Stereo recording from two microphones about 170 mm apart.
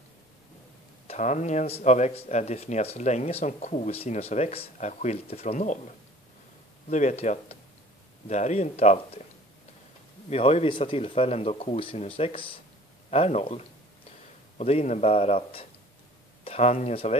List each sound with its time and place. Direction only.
1.0 s speech: 45° left (ahead or behind)
6.9 s speech: 45° left (ahead or behind)
10.3 s speech: 35° left (ahead or behind)